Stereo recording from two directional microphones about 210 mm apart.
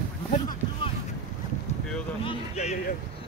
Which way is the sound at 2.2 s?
30° left (ahead or behind).